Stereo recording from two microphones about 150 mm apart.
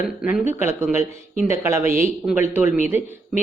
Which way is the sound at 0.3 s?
10° right (ahead or behind).